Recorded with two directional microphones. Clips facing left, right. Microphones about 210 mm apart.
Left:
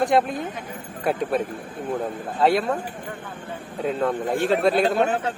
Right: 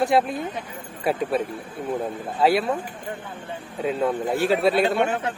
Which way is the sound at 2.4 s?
5° right (ahead or behind).